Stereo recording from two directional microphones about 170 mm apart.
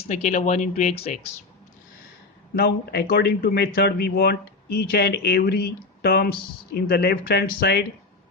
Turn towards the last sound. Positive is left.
turn(degrees=65)  # may be behind; listen again after turning